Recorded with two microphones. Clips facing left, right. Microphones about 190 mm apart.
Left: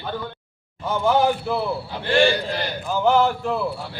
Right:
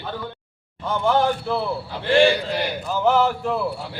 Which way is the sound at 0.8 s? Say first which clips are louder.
Left 1 dB; 5° left (ahead or behind).